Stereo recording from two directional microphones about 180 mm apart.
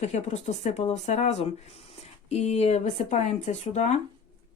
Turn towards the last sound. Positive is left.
turn(degrees=40)  # may be behind; listen again after turning